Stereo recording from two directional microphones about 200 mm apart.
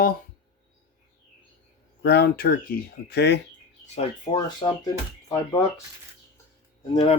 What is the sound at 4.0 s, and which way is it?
Speech, 25° left (ahead or behind).